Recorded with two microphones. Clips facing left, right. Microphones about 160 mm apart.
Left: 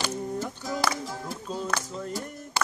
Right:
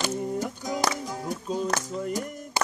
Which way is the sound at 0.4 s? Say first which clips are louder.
Right 2 dB; 15° right (ahead or behind).